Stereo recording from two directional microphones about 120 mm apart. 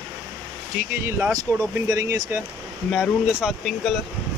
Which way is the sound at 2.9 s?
Centre (ahead or behind).